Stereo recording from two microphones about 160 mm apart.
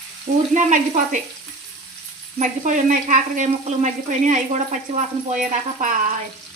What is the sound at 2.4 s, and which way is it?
Frying, 50° right (ahead or behind).